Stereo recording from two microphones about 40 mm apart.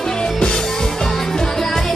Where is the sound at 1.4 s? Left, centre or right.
Centre.